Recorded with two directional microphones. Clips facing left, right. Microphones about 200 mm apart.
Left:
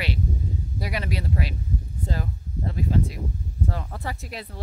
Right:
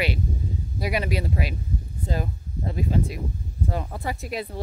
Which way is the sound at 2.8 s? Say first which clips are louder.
Even; 15° right (ahead or behind).